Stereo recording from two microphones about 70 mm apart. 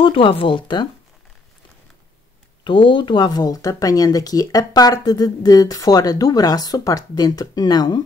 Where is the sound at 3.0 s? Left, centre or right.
Left.